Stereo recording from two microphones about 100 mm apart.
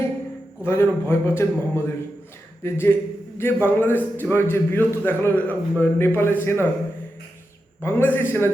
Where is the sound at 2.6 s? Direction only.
25° left (ahead or behind).